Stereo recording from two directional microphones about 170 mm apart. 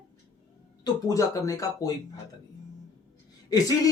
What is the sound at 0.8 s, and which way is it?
Speech, 20° left (ahead or behind).